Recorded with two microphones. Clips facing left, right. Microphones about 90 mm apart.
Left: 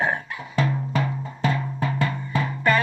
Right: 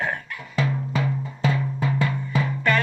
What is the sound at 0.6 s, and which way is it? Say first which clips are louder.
Music: left 1 dB; 5° right (ahead or behind).